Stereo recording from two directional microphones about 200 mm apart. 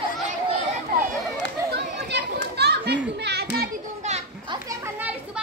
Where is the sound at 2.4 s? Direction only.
55° right (ahead or behind).